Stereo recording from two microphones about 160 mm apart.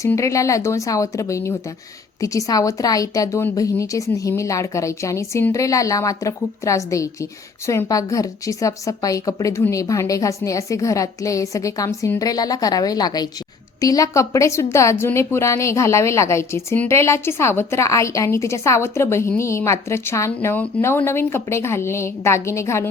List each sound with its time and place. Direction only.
0.0 s a woman's voice: 20° left (ahead or behind)